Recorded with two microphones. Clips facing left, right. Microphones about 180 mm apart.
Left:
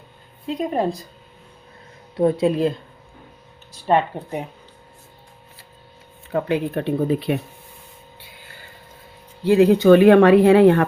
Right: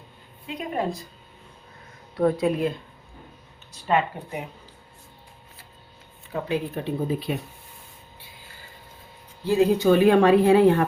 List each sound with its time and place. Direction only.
0.4 s speech: 35° left (ahead or behind)
2.1 s speech: 25° left (ahead or behind)
3.8 s speech: 35° left (ahead or behind)
6.3 s speech: 65° left (ahead or behind)
9.4 s speech: 70° left (ahead or behind)